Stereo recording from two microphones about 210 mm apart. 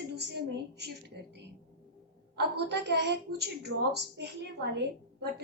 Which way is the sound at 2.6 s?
55° right (ahead or behind).